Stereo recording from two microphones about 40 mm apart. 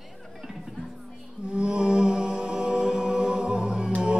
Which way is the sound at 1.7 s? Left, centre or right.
Right.